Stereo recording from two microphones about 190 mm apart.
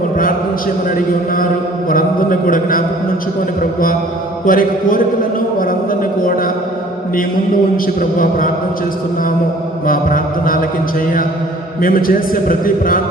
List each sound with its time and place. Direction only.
0.9 s a man's voice: 45° left (ahead or behind)
5.5 s a sound: 45° left (ahead or behind)
8.2 s a man's voice: 45° left (ahead or behind)
9.8 s a man's voice: 50° left (ahead or behind)
11.8 s a man's voice: 50° left (ahead or behind)